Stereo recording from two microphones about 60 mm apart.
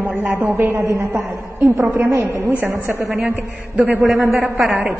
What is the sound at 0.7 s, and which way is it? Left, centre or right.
A woman's voice, right.